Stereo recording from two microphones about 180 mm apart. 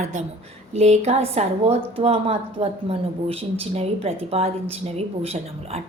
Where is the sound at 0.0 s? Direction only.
40° right (ahead or behind).